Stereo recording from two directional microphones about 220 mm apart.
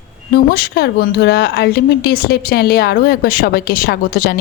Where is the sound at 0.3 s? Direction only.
45° left (ahead or behind).